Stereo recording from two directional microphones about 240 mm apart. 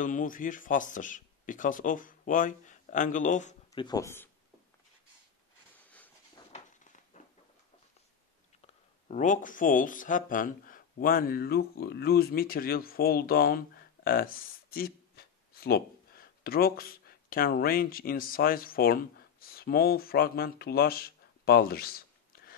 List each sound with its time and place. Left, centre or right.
0.0 s speech: left
3.7 s speech: centre
7.1 s a sound: left
9.1 s speech: left